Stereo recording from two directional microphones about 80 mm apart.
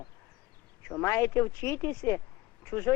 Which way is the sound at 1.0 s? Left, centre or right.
Left.